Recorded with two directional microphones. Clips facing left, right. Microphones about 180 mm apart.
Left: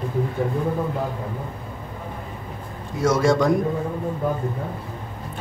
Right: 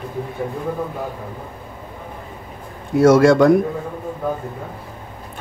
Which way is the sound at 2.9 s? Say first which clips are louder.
Right 8 dB; 65° right (ahead or behind).